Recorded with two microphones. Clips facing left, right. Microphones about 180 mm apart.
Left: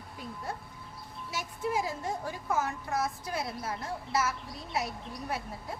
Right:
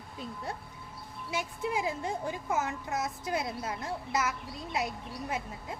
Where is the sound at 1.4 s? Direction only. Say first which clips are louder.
Left 1 dB; 20° right (ahead or behind).